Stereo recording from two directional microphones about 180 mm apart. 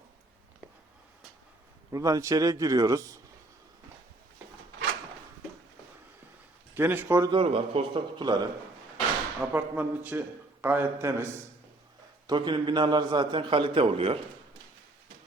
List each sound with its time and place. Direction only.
1.9 s a man's voice: 20° right (ahead or behind)
6.7 s a man's voice: 10° right (ahead or behind)
7.3 s a man's voice: 30° right (ahead or behind)
9.4 s a man's voice: 10° right (ahead or behind)
12.3 s a man's voice: 25° right (ahead or behind)